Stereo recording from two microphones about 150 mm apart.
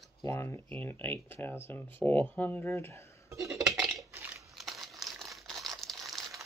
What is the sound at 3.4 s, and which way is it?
Dishes, 20° right (ahead or behind).